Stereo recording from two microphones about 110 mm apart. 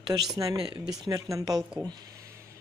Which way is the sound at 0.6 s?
40° right (ahead or behind).